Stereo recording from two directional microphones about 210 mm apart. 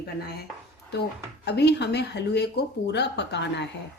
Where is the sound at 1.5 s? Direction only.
55° left (ahead or behind).